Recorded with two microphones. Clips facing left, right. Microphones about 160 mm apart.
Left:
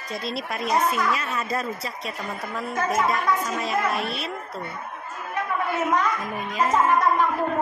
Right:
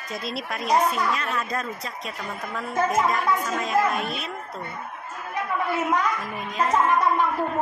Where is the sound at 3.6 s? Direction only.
5° left (ahead or behind).